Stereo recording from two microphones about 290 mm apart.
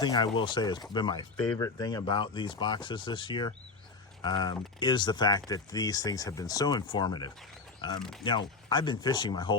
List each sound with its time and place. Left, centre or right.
0.0 s speech: centre